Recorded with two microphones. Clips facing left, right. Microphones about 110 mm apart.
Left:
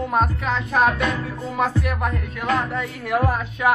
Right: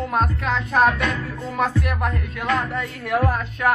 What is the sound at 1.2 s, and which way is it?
Music, centre (ahead or behind).